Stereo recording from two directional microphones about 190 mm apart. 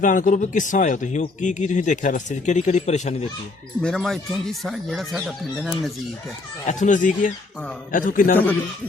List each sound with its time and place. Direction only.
0.0 s speech: 45° left (ahead or behind)
3.8 s speech: 5° left (ahead or behind)
6.7 s speech: 40° left (ahead or behind)